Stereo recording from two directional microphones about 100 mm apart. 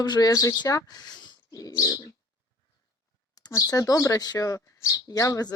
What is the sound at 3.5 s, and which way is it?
Speech, 35° left (ahead or behind).